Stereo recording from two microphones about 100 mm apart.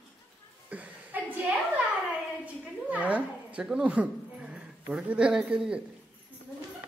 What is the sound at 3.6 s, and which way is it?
Speech, 10° right (ahead or behind).